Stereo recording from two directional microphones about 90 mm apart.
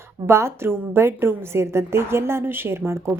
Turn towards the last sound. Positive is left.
turn(degrees=-30)  # may be behind; listen again after turning